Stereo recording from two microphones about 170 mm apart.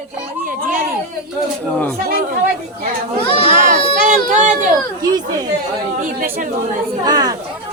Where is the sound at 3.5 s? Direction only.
55° right (ahead or behind).